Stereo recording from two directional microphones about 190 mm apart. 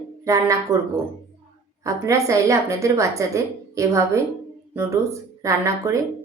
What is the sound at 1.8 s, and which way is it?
A woman's voice, 15° right (ahead or behind).